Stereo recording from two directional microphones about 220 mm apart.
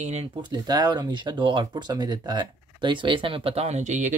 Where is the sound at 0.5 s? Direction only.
15° right (ahead or behind).